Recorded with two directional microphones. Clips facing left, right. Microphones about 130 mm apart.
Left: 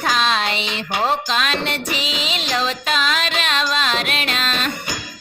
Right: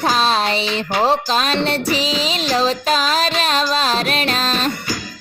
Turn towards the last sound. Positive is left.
turn(degrees=-35)  # may be behind; listen again after turning